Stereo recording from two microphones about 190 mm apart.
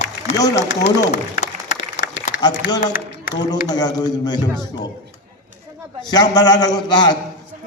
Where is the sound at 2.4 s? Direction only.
20° left (ahead or behind).